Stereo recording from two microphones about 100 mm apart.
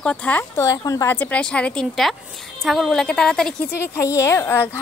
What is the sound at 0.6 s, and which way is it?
Speech, 35° left (ahead or behind).